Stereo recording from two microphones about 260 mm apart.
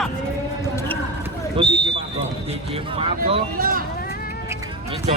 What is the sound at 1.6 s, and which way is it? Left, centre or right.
Speech, centre.